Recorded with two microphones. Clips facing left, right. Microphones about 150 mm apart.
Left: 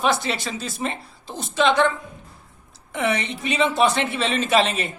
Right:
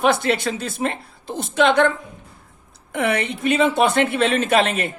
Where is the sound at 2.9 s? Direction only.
55° right (ahead or behind).